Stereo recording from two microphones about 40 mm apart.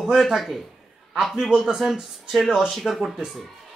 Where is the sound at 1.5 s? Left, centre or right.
Centre.